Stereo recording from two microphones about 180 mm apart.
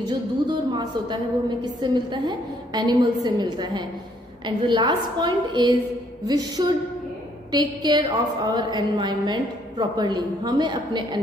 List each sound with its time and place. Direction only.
0.5 s a woman's voice: 25° right (ahead or behind)